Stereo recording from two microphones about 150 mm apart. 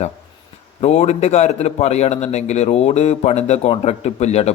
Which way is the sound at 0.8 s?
45° left (ahead or behind).